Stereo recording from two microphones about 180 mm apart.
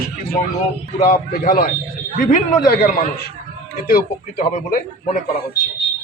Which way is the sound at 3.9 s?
50° left (ahead or behind).